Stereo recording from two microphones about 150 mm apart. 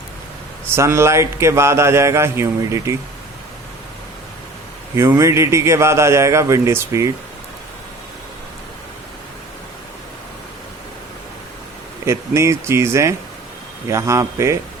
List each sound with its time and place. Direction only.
0.8 s a sound: 20° right (ahead or behind)
4.9 s a man's voice: 20° right (ahead or behind)
12.0 s a man's voice: 20° right (ahead or behind)